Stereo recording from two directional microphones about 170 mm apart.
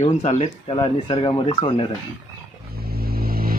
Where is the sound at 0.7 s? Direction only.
30° left (ahead or behind).